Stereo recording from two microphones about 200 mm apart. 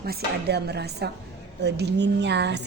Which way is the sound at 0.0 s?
55° right (ahead or behind).